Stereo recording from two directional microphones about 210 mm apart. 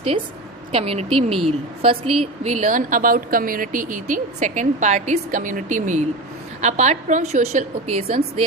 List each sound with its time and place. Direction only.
0.7 s a woman's voice: 25° right (ahead or behind)